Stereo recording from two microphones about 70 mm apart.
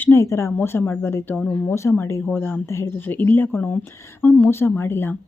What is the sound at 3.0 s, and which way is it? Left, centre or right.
A woman's voice, left.